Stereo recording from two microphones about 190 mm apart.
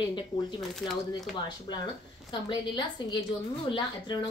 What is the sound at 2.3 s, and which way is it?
Speech, 25° left (ahead or behind).